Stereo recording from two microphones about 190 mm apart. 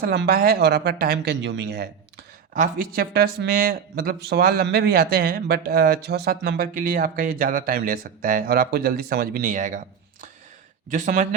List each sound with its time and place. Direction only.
0.0 s speech: 60° right (ahead or behind)
2.5 s speech: 45° right (ahead or behind)